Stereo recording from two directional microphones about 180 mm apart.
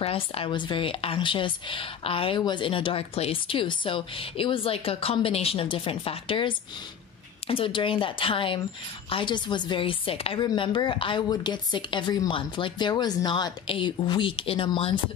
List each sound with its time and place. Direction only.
0.0 s a woman's voice: 30° left (ahead or behind)